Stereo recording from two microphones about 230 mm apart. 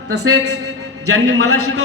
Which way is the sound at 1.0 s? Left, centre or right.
Right.